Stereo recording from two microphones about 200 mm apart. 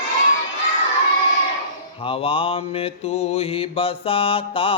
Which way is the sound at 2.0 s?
30° left (ahead or behind).